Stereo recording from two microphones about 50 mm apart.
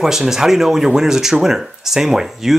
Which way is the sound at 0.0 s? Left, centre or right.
Centre.